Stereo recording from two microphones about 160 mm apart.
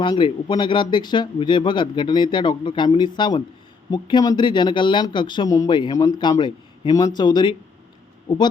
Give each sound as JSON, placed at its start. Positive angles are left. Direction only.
{"t": 0.0, "sound": "speech", "side_deg": 30}